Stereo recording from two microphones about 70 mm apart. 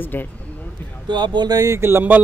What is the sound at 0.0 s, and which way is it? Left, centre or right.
Speech, left.